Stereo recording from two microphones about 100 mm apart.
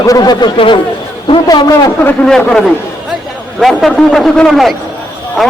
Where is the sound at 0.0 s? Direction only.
40° left (ahead or behind).